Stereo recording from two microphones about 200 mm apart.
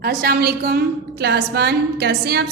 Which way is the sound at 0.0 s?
50° right (ahead or behind).